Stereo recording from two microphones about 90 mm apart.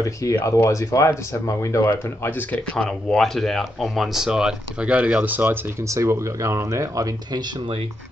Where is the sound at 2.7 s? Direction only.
5° left (ahead or behind); by 7.7 s 55° right (ahead or behind).